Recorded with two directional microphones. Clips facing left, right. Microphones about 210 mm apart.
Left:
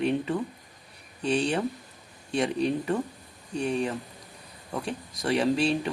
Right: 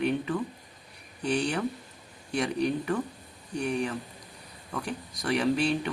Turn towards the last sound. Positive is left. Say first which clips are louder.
# left 2 dB
turn(degrees=25)  # may be behind; listen again after turning